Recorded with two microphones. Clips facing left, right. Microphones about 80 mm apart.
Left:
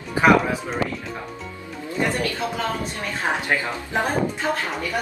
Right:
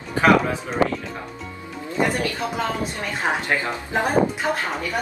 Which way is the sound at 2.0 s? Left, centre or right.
Centre.